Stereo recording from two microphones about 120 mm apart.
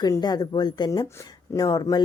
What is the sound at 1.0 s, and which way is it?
Speech, 20° left (ahead or behind).